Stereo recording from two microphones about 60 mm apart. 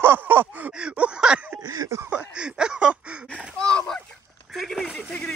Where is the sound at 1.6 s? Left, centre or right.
Right.